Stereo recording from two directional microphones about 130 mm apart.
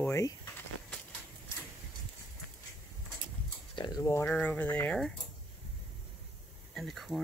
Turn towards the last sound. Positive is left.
turn(degrees=0)  # may be behind; listen again after turning